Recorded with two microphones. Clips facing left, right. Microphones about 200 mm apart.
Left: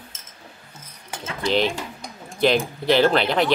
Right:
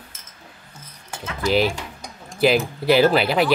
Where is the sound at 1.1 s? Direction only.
20° left (ahead or behind).